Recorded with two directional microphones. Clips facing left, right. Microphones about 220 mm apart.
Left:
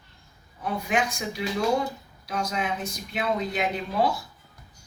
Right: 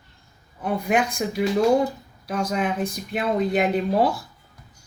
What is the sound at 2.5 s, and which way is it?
Speech, 50° right (ahead or behind).